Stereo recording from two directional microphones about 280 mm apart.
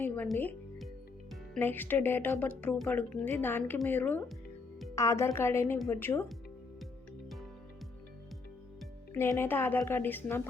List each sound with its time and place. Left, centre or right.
0.0 s music: centre
1.5 s a woman's voice: centre
9.1 s a woman's voice: centre